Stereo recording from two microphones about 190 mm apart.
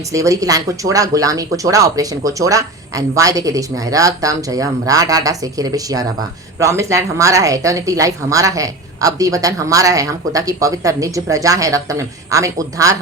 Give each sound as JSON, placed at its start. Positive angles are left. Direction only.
{"t": 0.1, "sound": "a woman's voice", "side_deg": -15}